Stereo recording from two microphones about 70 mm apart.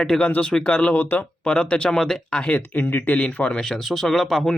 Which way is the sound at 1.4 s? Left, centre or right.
Centre.